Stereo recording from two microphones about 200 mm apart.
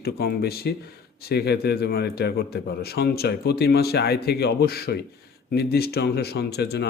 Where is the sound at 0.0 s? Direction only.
50° left (ahead or behind).